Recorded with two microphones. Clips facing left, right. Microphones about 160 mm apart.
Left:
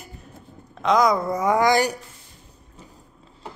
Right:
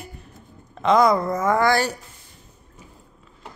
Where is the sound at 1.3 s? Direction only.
15° left (ahead or behind).